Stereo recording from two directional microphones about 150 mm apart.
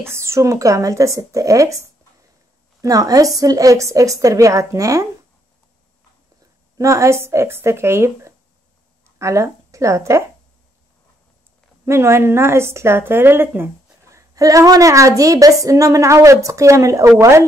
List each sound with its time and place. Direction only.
0.0 s speech: 20° right (ahead or behind)
6.8 s speech: 20° right (ahead or behind)
11.8 s speech: 15° right (ahead or behind)